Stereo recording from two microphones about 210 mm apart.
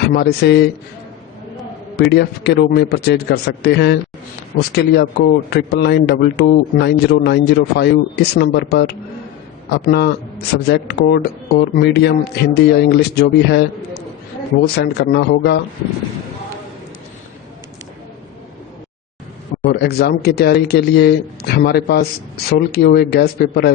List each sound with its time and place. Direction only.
0.1 s speech: 50° left (ahead or behind)
2.0 s speech: 50° left (ahead or behind)
19.6 s speech: 50° left (ahead or behind)